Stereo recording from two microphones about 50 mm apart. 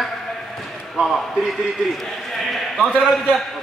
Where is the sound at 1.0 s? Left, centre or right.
Right.